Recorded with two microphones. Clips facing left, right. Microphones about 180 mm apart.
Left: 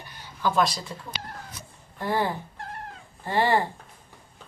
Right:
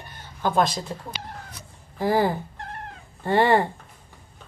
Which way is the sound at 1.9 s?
90° right.